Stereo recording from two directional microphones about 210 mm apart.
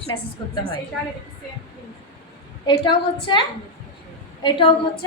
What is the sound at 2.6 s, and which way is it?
A woman's voice, 20° left (ahead or behind).